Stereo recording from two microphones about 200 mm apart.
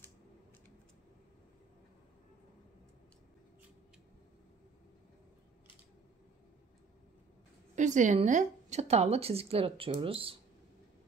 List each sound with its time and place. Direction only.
7.7 s a woman's voice: 35° right (ahead or behind)